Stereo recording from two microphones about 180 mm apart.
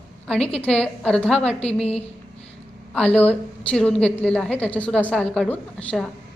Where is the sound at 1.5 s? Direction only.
35° left (ahead or behind).